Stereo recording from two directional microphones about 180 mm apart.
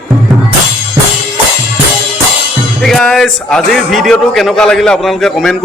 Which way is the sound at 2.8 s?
Centre (ahead or behind).